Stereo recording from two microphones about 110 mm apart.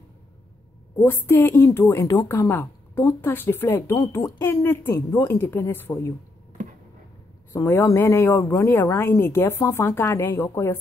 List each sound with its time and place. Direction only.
0.9 s speech: 25° left (ahead or behind)
2.2 s speech: 20° left (ahead or behind)
7.5 s speech: 25° left (ahead or behind)